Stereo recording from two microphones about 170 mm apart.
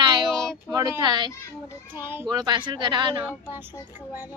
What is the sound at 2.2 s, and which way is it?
Speech, 25° right (ahead or behind).